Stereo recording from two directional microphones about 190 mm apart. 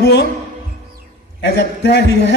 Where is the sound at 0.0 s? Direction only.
60° left (ahead or behind).